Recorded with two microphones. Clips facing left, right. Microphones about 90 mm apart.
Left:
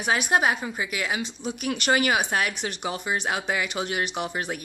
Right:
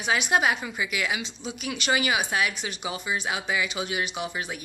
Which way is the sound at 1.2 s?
55° left (ahead or behind).